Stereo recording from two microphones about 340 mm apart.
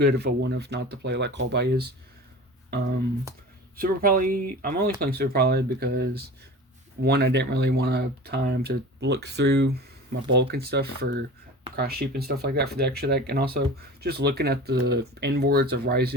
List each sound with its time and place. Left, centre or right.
0.0 s speech: right